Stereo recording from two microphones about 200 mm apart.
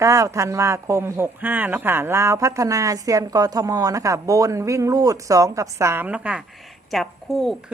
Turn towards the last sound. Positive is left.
turn(degrees=0)  # may be behind; listen again after turning